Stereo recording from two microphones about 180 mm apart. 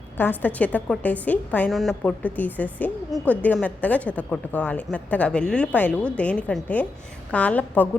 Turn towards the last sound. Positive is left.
turn(degrees=10)  # may be behind; listen again after turning